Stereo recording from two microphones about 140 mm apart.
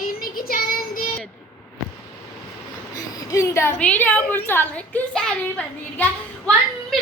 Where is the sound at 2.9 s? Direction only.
25° left (ahead or behind).